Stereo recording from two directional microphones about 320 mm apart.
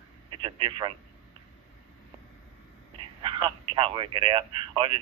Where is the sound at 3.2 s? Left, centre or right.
Centre.